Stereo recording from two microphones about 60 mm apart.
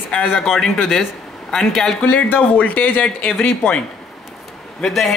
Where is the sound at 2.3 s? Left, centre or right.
Left.